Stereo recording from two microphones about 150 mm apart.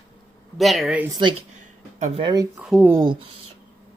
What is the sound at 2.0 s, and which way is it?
Speech, 55° right (ahead or behind).